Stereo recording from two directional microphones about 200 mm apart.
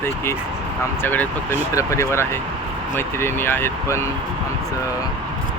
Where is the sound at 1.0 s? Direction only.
10° left (ahead or behind).